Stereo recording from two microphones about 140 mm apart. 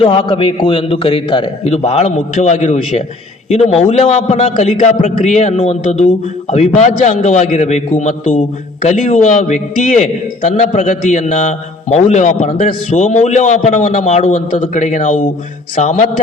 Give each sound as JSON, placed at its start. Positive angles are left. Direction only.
{"t": 0.0, "sound": "a man's voice", "side_deg": 35}
{"t": 3.5, "sound": "a man's voice", "side_deg": 50}